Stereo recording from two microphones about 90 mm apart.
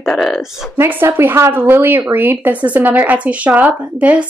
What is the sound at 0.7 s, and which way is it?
Speech, 25° right (ahead or behind).